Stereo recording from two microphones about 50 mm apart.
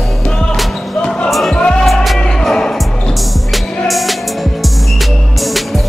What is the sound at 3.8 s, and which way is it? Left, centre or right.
Music, centre.